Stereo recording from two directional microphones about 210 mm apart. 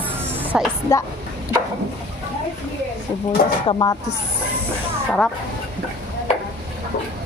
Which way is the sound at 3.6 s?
20° left (ahead or behind).